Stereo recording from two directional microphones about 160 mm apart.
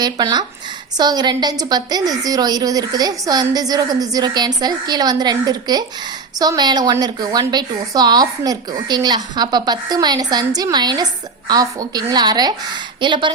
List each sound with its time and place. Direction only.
0.0 s a woman's voice: 25° right (ahead or behind)